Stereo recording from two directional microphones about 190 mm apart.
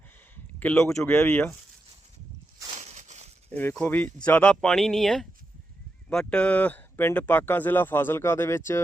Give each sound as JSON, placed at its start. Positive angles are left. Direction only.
{"t": 0.6, "sound": "speech", "side_deg": 10}
{"t": 2.7, "sound": "a sound", "side_deg": -40}
{"t": 3.5, "sound": "speech", "side_deg": 10}